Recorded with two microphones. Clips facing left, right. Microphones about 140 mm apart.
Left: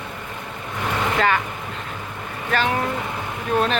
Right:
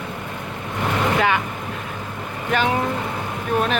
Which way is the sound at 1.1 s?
10° right (ahead or behind).